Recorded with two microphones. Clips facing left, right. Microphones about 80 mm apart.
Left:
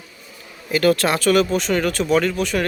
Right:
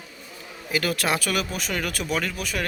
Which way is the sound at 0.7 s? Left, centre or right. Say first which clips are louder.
Left 7 dB; centre.